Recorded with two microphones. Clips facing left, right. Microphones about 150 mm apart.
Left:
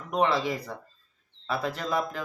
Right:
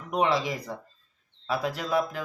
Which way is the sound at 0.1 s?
10° right (ahead or behind).